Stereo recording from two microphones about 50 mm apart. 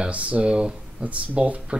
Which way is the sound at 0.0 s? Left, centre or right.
Right.